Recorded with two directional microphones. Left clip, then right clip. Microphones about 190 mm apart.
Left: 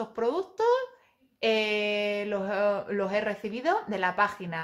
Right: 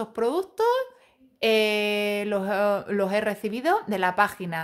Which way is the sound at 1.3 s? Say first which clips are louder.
Right 4 dB; 40° right (ahead or behind).